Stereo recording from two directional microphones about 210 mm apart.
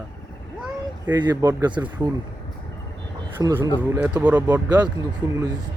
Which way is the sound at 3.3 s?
20° right (ahead or behind).